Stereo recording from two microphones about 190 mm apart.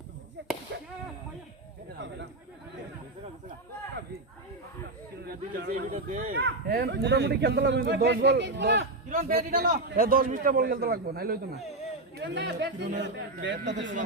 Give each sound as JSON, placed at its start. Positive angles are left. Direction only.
{"t": 0.4, "sound": "a sound", "side_deg": -65}
{"t": 5.3, "sound": "a man's voice", "side_deg": -50}
{"t": 9.0, "sound": "a man's voice", "side_deg": -50}
{"t": 12.1, "sound": "a man's voice", "side_deg": -70}